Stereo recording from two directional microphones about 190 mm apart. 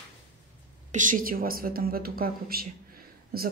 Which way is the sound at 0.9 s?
45° right (ahead or behind).